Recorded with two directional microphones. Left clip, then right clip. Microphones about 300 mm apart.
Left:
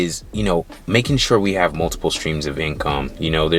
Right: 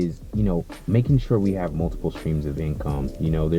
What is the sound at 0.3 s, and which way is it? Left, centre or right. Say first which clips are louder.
Speech: left 7 dB; centre.